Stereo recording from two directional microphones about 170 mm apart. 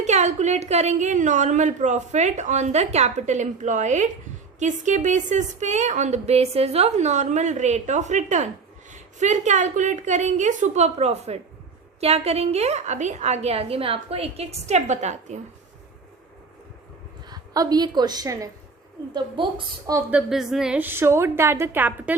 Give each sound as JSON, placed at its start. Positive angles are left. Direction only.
{"t": 0.0, "sound": "a woman's voice", "side_deg": -40}
{"t": 17.2, "sound": "a woman's voice", "side_deg": -20}
{"t": 20.0, "sound": "a woman's voice", "side_deg": -10}